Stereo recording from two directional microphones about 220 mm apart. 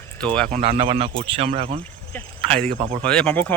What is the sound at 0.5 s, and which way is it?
Speech, 25° right (ahead or behind).